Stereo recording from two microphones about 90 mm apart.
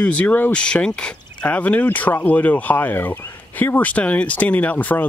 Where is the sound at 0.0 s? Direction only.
15° left (ahead or behind).